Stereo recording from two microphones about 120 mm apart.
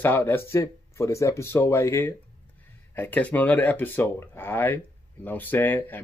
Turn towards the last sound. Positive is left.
turn(degrees=15)  # may be behind; listen again after turning